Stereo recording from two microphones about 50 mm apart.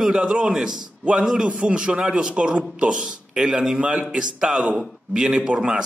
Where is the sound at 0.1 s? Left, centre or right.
Centre.